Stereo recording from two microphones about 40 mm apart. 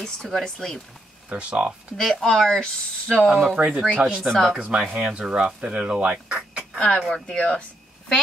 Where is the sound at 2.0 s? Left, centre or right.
Centre.